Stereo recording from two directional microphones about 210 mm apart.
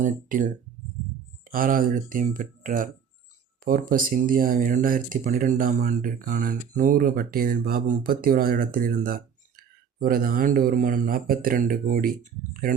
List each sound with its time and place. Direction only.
0.0 s speech: 40° right (ahead or behind)
1.5 s speech: 40° right (ahead or behind)